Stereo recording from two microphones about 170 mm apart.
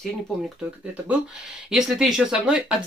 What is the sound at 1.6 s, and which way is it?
Speech, 5° right (ahead or behind).